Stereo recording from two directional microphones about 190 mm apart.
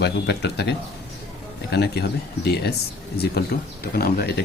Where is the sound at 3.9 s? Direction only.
55° left (ahead or behind).